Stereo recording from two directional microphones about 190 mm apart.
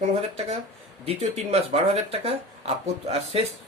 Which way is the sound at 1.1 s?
35° right (ahead or behind).